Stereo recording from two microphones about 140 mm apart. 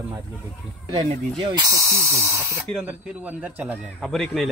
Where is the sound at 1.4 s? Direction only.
30° right (ahead or behind); by 3.8 s 10° right (ahead or behind).